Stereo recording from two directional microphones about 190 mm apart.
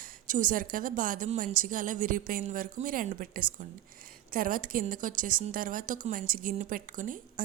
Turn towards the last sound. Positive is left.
turn(degrees=-45)  # may be behind; listen again after turning